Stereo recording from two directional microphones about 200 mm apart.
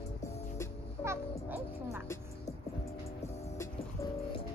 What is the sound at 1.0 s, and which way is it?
Music, 15° right (ahead or behind).